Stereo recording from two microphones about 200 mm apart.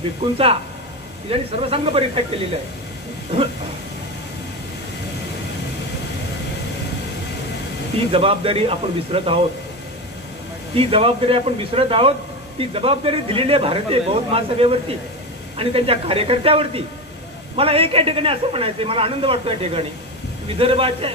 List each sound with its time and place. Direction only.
1.3 s speech: 30° right (ahead or behind)
8.1 s speech: 30° right (ahead or behind)
10.7 s speech: 25° right (ahead or behind)